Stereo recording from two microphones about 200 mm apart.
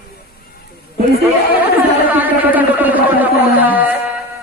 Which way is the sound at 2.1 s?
10° right (ahead or behind).